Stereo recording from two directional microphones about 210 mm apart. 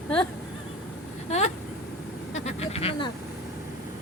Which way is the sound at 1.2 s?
30° left (ahead or behind).